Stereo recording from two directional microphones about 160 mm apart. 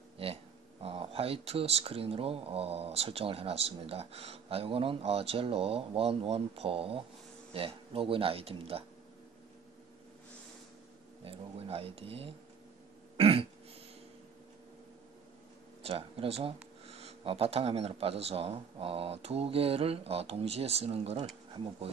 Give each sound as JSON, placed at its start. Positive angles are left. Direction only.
{"t": 0.2, "sound": "speech", "side_deg": -35}
{"t": 11.2, "sound": "speech", "side_deg": -35}
{"t": 13.2, "sound": "a sound", "side_deg": -35}
{"t": 15.8, "sound": "speech", "side_deg": -40}